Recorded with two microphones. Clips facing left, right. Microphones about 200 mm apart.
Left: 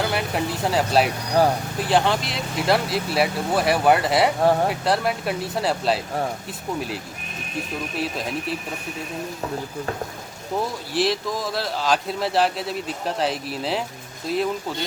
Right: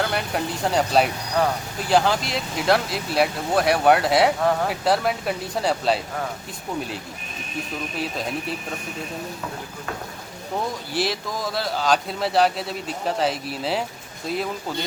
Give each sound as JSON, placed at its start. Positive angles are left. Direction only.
{"t": 0.0, "sound": "a man's voice", "side_deg": 5}
{"t": 4.4, "sound": "speech", "side_deg": 30}
{"t": 4.7, "sound": "a man's voice", "side_deg": 0}
{"t": 10.9, "sound": "a man's voice", "side_deg": 0}